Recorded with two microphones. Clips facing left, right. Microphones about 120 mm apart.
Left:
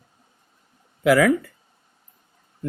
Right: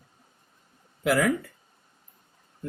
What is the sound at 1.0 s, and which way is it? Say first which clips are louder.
Speech: left 7 dB; 90° left.